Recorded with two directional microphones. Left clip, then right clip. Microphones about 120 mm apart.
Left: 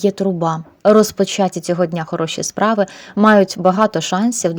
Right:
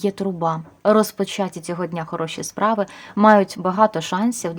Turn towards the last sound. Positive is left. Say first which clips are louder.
# left 5 dB
turn(degrees=35)  # may be behind; listen again after turning